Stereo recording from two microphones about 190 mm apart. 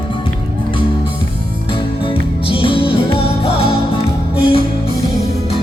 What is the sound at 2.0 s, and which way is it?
Music, 30° left (ahead or behind).